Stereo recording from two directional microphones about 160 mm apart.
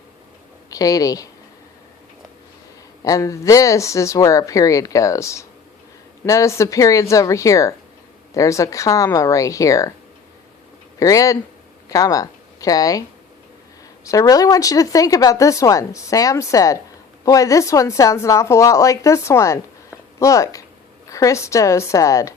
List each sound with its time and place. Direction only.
0.7 s speech: 20° left (ahead or behind)
3.0 s speech: 20° left (ahead or behind)
11.0 s speech: 20° left (ahead or behind)